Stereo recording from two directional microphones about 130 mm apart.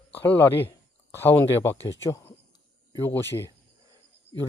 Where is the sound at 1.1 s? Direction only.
20° left (ahead or behind).